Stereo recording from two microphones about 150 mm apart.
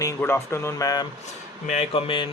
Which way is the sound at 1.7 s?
40° left (ahead or behind).